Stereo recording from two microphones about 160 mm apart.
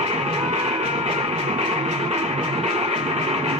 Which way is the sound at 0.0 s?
40° right (ahead or behind).